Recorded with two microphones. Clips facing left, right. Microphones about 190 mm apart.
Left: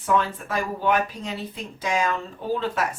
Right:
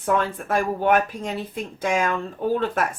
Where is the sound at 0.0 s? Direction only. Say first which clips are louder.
Right 1 dB; 50° right (ahead or behind).